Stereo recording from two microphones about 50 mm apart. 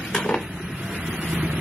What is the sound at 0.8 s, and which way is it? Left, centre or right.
Vehicle, right.